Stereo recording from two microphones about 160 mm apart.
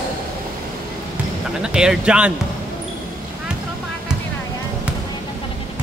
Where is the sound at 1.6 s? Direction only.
5° right (ahead or behind).